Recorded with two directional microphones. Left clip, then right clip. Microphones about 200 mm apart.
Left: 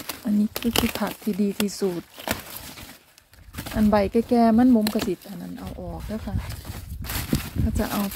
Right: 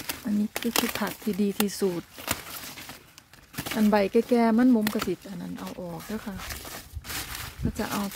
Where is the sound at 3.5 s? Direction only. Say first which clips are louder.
Left 1 dB; 10° right (ahead or behind).